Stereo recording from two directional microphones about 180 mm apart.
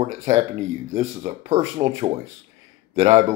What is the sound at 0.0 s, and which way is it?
Speech, 35° right (ahead or behind).